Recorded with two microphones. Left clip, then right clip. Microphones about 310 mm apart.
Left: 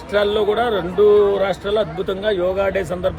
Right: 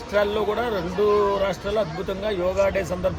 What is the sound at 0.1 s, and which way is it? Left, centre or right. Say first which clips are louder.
Speech: left 5 dB; centre.